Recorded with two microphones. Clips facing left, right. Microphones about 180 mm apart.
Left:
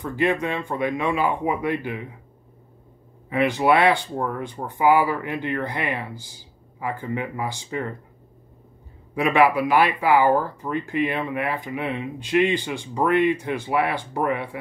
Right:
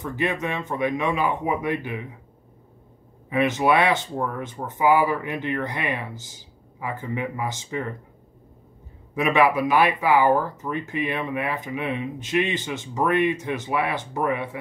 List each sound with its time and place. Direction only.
0.0 s speech: 20° right (ahead or behind)
3.3 s speech: 20° right (ahead or behind)
9.1 s speech: 20° right (ahead or behind)